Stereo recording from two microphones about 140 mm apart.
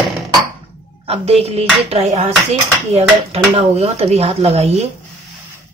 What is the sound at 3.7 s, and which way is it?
Speech, 50° right (ahead or behind).